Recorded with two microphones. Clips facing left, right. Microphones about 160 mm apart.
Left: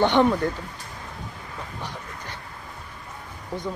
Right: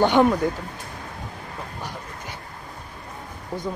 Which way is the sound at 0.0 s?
10° right (ahead or behind).